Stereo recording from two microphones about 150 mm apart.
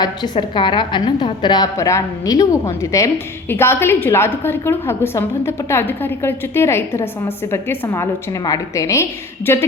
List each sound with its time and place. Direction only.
0.0 s a woman's voice: 30° left (ahead or behind)